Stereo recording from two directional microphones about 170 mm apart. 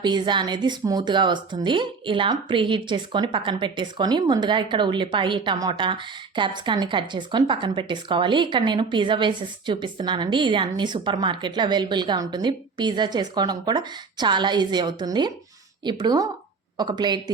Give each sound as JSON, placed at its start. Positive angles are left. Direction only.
{"t": 0.0, "sound": "speech", "side_deg": -25}